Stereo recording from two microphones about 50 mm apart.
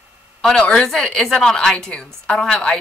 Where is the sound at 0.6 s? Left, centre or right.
Left.